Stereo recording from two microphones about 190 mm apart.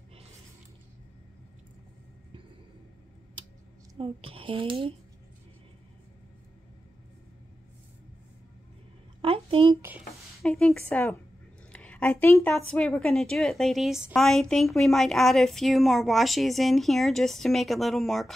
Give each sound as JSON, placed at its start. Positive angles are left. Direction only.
{"t": 4.0, "sound": "speech", "side_deg": -30}
{"t": 9.2, "sound": "a sound", "side_deg": -30}
{"t": 9.8, "sound": "speech", "side_deg": -10}
{"t": 10.4, "sound": "a woman's voice", "side_deg": 0}
{"t": 11.7, "sound": "a sound", "side_deg": 5}
{"t": 12.5, "sound": "a woman's voice", "side_deg": 5}